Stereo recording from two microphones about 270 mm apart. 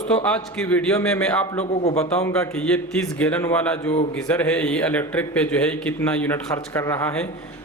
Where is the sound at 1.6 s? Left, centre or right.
Left.